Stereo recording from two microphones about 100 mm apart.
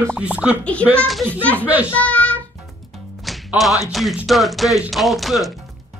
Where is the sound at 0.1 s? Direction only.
15° right (ahead or behind).